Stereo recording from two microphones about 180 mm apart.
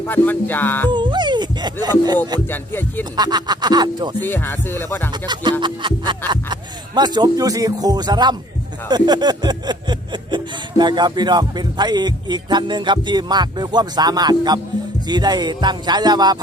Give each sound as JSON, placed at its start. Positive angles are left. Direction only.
{"t": 0.1, "sound": "music", "side_deg": 10}
{"t": 0.9, "sound": "speech", "side_deg": -25}
{"t": 2.5, "sound": "music", "side_deg": 10}
{"t": 3.0, "sound": "speech", "side_deg": -25}
{"t": 4.2, "sound": "music", "side_deg": 10}
{"t": 5.1, "sound": "speech", "side_deg": -25}